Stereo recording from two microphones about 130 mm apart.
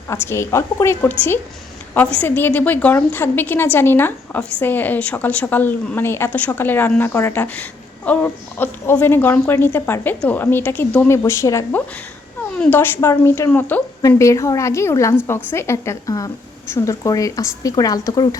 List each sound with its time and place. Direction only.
0.1 s speech: 20° left (ahead or behind)
2.1 s speech: 15° left (ahead or behind)
14.2 s speech: 25° left (ahead or behind)